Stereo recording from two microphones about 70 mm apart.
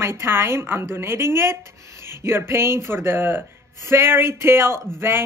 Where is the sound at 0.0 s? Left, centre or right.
Right.